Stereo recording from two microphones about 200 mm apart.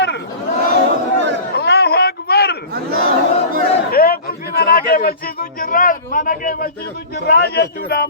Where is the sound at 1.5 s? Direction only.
55° left (ahead or behind).